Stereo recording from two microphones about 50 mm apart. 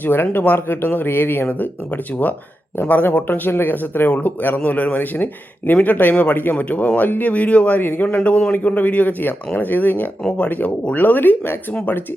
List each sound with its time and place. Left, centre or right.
0.0 s speech: left
2.8 s speech: left
7.8 s speech: left